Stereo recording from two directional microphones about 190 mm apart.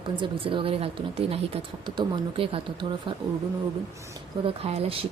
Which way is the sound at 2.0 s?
30° right (ahead or behind).